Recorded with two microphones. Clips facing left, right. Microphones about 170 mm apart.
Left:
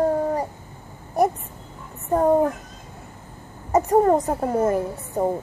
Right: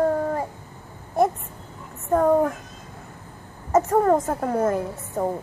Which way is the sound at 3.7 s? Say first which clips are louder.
Left 1 dB; 15° left (ahead or behind).